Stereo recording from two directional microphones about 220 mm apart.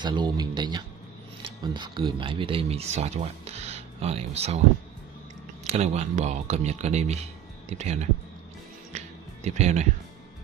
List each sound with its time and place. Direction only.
0.0 s speech: 20° right (ahead or behind)
5.7 s speech: 30° right (ahead or behind)
8.9 s music: 30° right (ahead or behind)